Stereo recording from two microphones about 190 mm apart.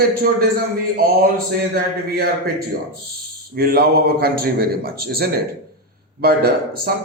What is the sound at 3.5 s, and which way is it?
A man's voice, 55° right (ahead or behind).